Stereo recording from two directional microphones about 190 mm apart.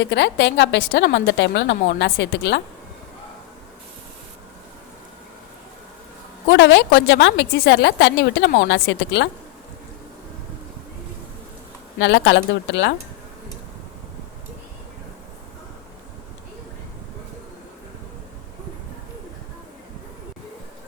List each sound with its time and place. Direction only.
0.0 s a woman's voice: 65° left (ahead or behind)
6.5 s a woman's voice: 70° left (ahead or behind)
11.9 s a woman's voice: 70° left (ahead or behind)